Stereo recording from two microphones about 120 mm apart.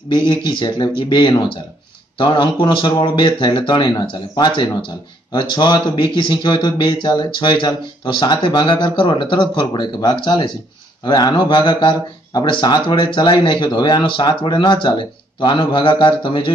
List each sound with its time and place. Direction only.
0.1 s speech: 35° left (ahead or behind)